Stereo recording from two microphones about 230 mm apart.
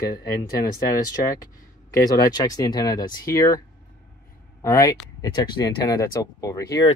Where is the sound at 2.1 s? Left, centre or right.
Centre.